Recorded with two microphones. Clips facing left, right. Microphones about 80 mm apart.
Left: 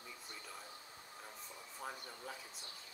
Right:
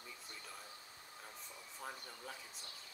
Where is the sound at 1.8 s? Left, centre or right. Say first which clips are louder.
Left 2 dB; centre.